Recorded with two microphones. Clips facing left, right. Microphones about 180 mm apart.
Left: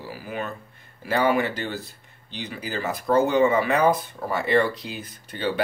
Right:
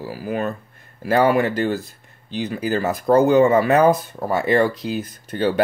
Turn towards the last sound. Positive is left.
turn(degrees=-45)  # may be behind; listen again after turning